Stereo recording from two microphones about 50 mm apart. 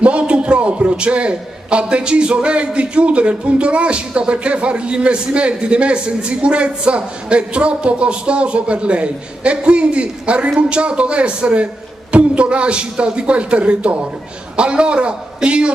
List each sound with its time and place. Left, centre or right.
0.0 s a man's voice: right